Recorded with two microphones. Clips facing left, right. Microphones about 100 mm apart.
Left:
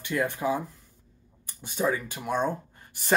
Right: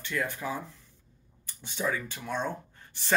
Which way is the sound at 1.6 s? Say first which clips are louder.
Left 4 dB; 15° left (ahead or behind).